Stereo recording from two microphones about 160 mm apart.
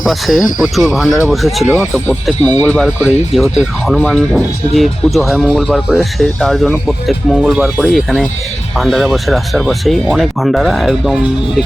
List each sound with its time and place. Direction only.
0.0 s speech: centre (ahead or behind)
1.0 s speech: 20° left (ahead or behind)
1.3 s speech: centre (ahead or behind)